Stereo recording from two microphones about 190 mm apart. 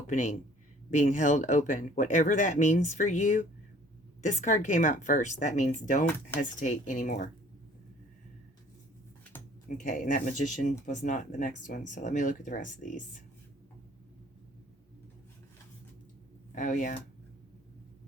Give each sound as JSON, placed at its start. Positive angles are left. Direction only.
{"t": 0.1, "sound": "speech", "side_deg": 40}
{"t": 9.6, "sound": "speech", "side_deg": 45}
{"t": 16.6, "sound": "speech", "side_deg": 40}